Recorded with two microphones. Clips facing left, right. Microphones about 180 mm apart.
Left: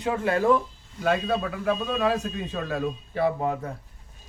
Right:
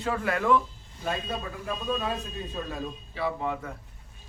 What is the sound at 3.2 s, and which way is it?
Speech, 45° left (ahead or behind).